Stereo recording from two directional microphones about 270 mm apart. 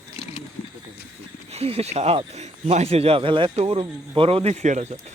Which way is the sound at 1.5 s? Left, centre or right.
Right.